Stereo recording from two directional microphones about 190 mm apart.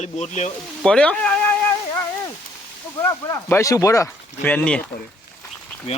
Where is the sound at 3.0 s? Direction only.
15° left (ahead or behind).